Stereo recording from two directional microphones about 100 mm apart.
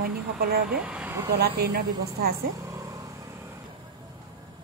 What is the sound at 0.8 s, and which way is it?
Speech, 15° right (ahead or behind).